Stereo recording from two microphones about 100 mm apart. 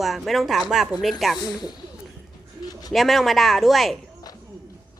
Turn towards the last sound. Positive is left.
turn(degrees=0)  # may be behind; listen again after turning